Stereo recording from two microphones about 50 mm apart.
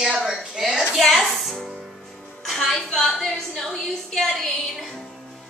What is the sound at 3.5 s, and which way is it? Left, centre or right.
Speech, centre.